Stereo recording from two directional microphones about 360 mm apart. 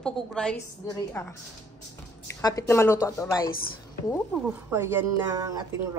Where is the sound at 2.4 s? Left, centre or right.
Centre.